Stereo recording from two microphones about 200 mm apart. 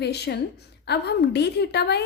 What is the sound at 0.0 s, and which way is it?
A woman's voice, 55° left (ahead or behind).